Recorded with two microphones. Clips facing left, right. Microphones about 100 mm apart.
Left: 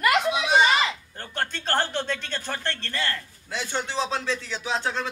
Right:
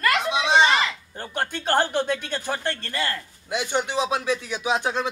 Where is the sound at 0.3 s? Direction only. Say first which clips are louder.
Right 2 dB; 25° right (ahead or behind).